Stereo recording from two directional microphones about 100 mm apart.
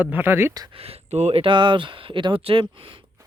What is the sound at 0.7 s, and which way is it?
Speech, 80° right.